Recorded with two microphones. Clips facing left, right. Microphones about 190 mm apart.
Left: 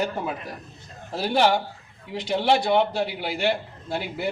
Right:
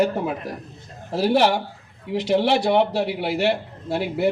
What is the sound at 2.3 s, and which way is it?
A man's voice, 70° right (ahead or behind).